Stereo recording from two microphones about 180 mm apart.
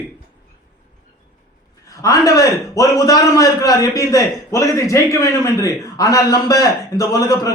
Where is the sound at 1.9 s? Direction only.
20° left (ahead or behind).